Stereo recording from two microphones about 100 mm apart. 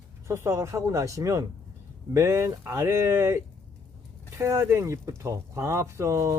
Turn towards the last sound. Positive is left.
turn(degrees=-30)  # may be behind; listen again after turning